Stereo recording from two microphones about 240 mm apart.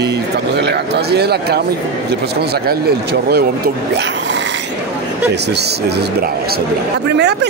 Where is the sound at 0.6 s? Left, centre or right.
Right.